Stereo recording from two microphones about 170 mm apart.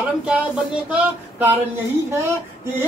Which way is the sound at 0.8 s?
10° right (ahead or behind).